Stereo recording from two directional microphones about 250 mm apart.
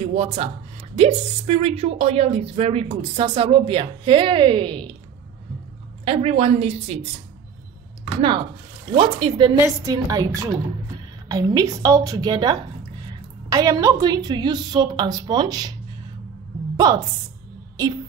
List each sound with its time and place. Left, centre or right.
0.0 s speech: right
6.0 s speech: right
8.9 s a woman's voice: centre
16.7 s a woman's voice: centre